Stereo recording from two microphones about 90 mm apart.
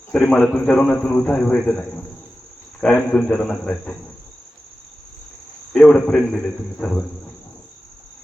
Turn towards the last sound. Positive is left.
turn(degrees=10)  # may be behind; listen again after turning